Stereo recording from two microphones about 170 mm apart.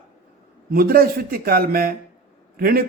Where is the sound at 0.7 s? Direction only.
65° right (ahead or behind).